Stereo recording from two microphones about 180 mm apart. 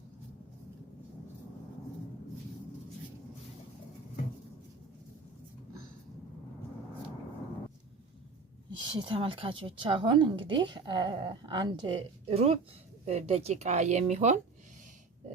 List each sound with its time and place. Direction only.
8.8 s speech: 25° right (ahead or behind)